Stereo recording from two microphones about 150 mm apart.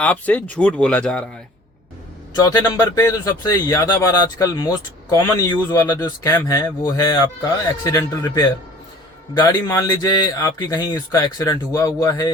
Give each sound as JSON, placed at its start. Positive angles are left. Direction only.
{"t": 0.0, "sound": "speech", "side_deg": 10}
{"t": 2.4, "sound": "speech", "side_deg": 25}